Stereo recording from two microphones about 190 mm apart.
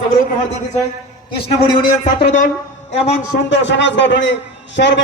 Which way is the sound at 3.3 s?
70° left (ahead or behind).